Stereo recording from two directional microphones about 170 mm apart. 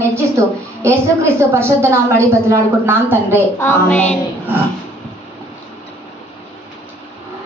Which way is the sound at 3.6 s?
15° left (ahead or behind).